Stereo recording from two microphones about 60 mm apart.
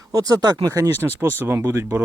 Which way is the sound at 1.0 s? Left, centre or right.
Right.